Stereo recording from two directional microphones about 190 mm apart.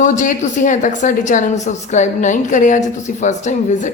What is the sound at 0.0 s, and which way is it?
A woman's voice, 40° left (ahead or behind).